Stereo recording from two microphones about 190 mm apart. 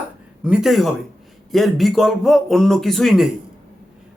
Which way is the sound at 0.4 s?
5° right (ahead or behind).